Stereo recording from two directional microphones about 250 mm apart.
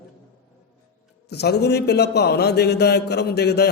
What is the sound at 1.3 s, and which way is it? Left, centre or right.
A man's voice, left.